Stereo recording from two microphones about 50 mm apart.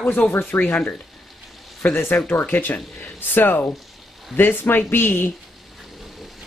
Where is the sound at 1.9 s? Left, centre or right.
Left.